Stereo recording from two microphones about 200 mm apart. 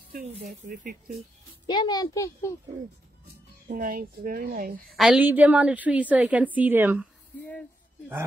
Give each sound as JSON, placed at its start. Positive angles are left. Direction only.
{"t": 0.1, "sound": "speech", "side_deg": -45}
{"t": 1.7, "sound": "a child's voice", "side_deg": 20}
{"t": 3.6, "sound": "speech", "side_deg": -45}
{"t": 4.8, "sound": "a woman's voice", "side_deg": 0}